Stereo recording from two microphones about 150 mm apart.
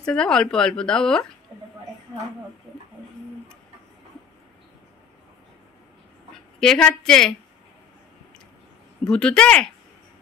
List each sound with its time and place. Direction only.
0.0 s speech: 5° left (ahead or behind)
6.6 s speech: 5° left (ahead or behind)
9.0 s speech: 5° left (ahead or behind)